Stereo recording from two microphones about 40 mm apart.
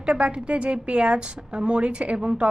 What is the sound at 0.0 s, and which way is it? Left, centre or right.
A woman's voice, right.